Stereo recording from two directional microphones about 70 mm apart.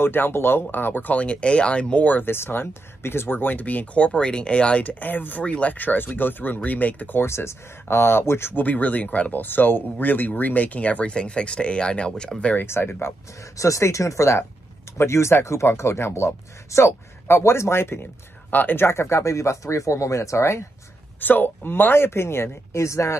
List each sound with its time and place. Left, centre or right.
0.0 s speech: left; by 12.6 s centre
12.6 s speech: left
18.5 s speech: left
18.9 s speech: left
21.2 s speech: left